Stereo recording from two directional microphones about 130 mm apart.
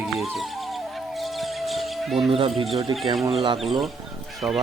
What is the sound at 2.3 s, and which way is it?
Speech, 45° right (ahead or behind).